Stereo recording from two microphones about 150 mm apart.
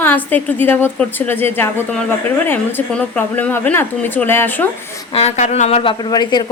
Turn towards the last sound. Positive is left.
turn(degrees=30)  # may be behind; listen again after turning